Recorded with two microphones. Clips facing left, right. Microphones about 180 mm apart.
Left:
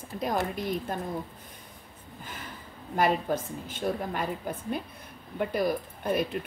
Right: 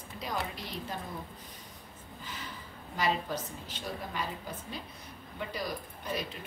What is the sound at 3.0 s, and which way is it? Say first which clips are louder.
A woman's voice: left 6 dB; 50° left (ahead or behind).